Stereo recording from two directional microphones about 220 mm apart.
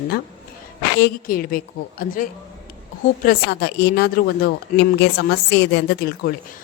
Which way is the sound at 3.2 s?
45° left (ahead or behind).